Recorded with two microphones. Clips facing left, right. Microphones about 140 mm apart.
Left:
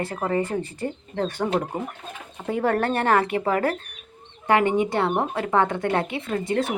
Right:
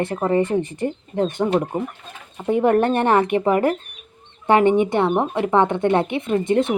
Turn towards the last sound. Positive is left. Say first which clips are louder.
# right 6 dB
turn(degrees=-25)  # may be behind; listen again after turning